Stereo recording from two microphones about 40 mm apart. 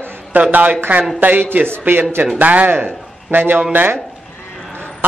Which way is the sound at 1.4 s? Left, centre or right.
Right.